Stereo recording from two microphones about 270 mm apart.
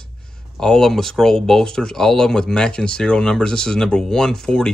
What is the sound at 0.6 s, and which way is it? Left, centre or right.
Speech, centre.